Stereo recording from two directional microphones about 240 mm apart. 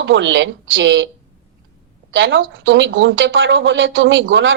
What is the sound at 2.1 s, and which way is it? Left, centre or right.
A woman's voice, right.